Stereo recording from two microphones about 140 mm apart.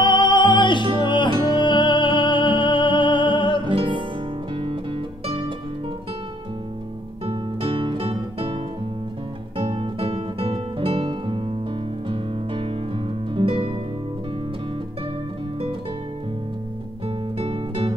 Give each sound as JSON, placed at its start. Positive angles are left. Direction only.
{"t": 0.0, "sound": "music", "side_deg": 35}
{"t": 3.7, "sound": "music", "side_deg": -35}
{"t": 7.2, "sound": "music", "side_deg": -40}
{"t": 9.6, "sound": "music", "side_deg": -40}
{"t": 17.4, "sound": "music", "side_deg": -40}